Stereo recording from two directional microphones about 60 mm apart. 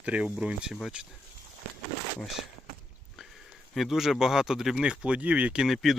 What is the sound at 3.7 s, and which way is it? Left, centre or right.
Speech, centre.